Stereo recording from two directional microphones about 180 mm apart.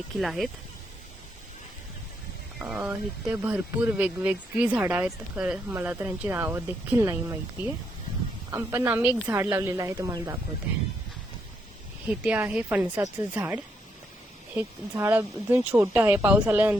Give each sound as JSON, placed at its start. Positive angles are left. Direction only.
{"t": 0.2, "sound": "speech", "side_deg": 0}
{"t": 2.6, "sound": "speech", "side_deg": -5}
{"t": 12.0, "sound": "speech", "side_deg": -10}